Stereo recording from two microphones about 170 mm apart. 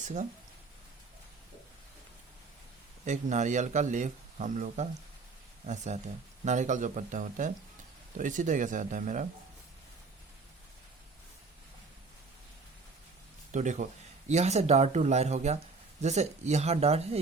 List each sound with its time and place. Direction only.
0.0 s speech: 45° right (ahead or behind)
3.0 s speech: 45° right (ahead or behind)
13.5 s speech: 45° right (ahead or behind)